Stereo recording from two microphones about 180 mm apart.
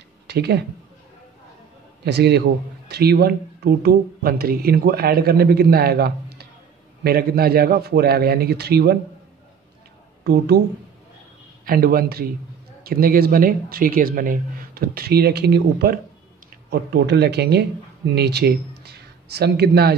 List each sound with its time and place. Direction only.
0.3 s speech: 65° right (ahead or behind)
2.0 s speech: 70° right (ahead or behind)
10.2 s speech: 65° right (ahead or behind)
11.6 s speech: 55° right (ahead or behind)